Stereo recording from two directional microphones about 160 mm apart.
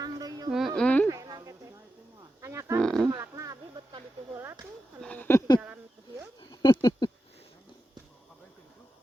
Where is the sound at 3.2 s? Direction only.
20° right (ahead or behind).